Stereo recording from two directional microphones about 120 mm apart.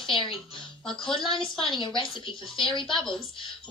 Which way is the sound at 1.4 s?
45° left (ahead or behind).